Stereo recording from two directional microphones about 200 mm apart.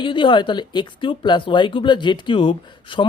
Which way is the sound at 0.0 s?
25° left (ahead or behind).